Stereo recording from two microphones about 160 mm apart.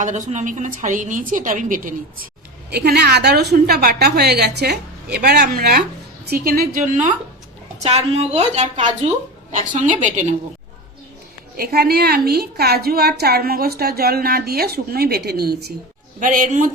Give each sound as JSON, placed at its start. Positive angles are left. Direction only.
{"t": 0.0, "sound": "a woman's voice", "side_deg": -50}
{"t": 2.7, "sound": "a woman's voice", "side_deg": -90}
{"t": 11.5, "sound": "a woman's voice", "side_deg": -75}
{"t": 16.2, "sound": "a woman's voice", "side_deg": -55}